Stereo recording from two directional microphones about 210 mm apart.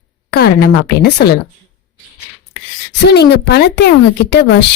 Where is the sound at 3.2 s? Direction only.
50° left (ahead or behind).